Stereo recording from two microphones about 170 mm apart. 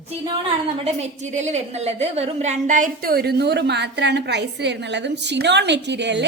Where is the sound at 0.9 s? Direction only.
40° right (ahead or behind).